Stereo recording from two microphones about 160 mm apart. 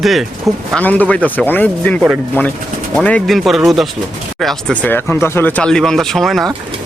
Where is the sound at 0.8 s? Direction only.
10° left (ahead or behind).